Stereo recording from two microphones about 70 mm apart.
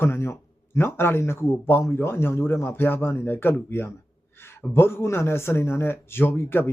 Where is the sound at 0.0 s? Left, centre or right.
Left.